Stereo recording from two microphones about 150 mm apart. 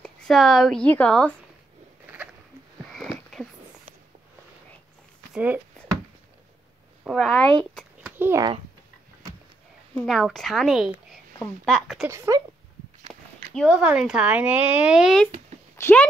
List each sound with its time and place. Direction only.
0.0 s a woman's voice: centre (ahead or behind)
2.9 s a sound: 5° left (ahead or behind)
5.3 s speech: 10° right (ahead or behind)
7.1 s a woman's voice: centre (ahead or behind)
8.0 s a sound: 15° right (ahead or behind)
10.0 s a woman's voice: centre (ahead or behind)
12.3 s speech: 25° right (ahead or behind)
13.1 s speech: 5° right (ahead or behind)
15.7 s speech: 15° left (ahead or behind)